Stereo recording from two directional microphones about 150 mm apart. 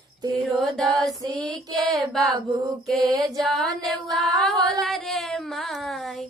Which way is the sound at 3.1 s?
25° right (ahead or behind).